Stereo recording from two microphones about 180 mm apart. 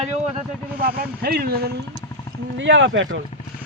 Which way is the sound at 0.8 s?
60° right (ahead or behind).